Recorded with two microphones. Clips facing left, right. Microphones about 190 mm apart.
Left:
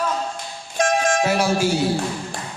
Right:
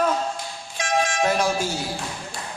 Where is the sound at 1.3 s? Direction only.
10° left (ahead or behind).